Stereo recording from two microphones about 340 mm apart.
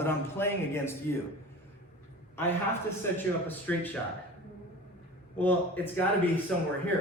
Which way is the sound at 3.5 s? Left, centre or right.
Centre.